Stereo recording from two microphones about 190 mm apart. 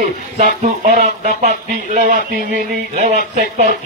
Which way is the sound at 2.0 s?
45° right (ahead or behind).